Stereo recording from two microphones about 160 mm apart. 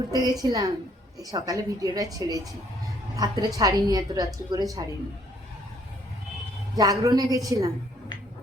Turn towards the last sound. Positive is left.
turn(degrees=-20)  # may be behind; listen again after turning